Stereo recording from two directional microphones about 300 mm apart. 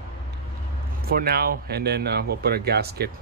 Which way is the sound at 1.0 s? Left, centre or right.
Right.